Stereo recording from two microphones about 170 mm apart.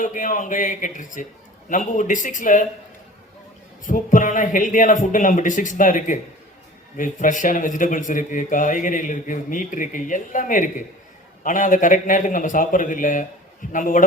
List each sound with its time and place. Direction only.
0.0 s a man's voice: 50° left (ahead or behind)
3.8 s a man's voice: 50° left (ahead or behind)